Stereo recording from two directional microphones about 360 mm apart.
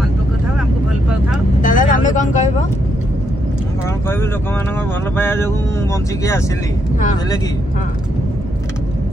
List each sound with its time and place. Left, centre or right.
1.6 s vehicle: left
5.1 s speech: centre